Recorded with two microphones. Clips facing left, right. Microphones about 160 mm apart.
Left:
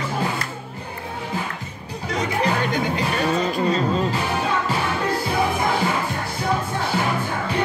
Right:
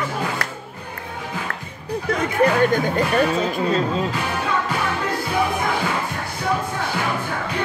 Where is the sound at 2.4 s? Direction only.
50° right (ahead or behind).